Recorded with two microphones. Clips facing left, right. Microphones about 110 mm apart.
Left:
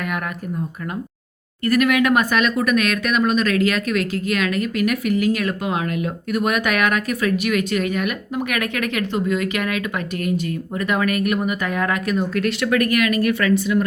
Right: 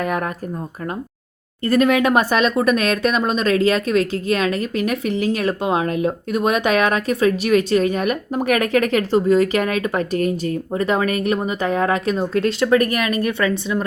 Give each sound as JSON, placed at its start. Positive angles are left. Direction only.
{"t": 1.6, "sound": "speech", "side_deg": -30}